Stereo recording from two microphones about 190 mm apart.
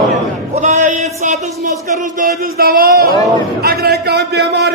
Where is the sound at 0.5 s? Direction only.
35° right (ahead or behind).